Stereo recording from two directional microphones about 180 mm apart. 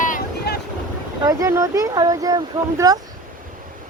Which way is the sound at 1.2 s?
20° right (ahead or behind).